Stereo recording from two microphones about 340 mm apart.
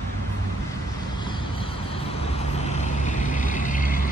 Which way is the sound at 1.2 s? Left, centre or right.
Centre.